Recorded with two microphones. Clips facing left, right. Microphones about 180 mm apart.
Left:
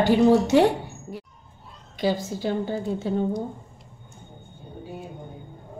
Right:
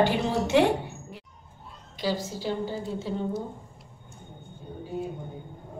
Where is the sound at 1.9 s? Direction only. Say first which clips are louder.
Left 4 dB; 55° left (ahead or behind).